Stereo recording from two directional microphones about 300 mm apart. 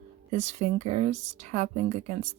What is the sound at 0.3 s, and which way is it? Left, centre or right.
Speech, right.